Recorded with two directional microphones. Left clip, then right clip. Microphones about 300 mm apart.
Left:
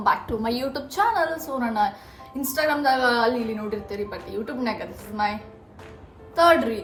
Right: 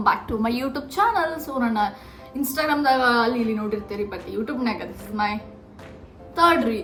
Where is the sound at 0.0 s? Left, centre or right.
Centre.